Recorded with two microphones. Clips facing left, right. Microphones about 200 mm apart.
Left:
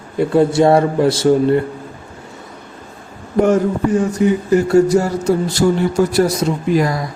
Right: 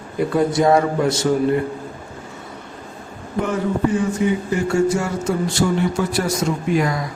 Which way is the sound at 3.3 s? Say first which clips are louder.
Left 7 dB; 45° left (ahead or behind).